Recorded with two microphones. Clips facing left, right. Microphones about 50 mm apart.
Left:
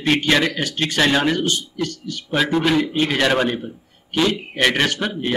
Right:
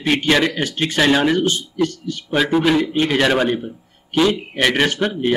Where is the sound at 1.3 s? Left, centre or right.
Right.